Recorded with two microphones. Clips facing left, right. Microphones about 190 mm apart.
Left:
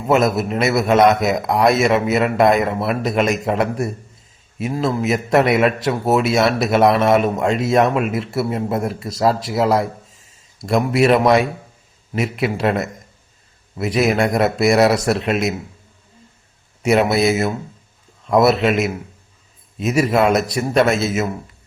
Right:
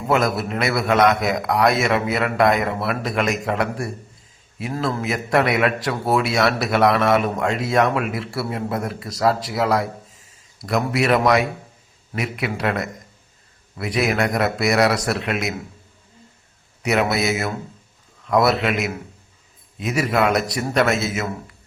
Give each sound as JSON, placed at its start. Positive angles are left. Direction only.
{"t": 0.1, "sound": "a man's voice", "side_deg": 25}
{"t": 16.8, "sound": "a man's voice", "side_deg": 25}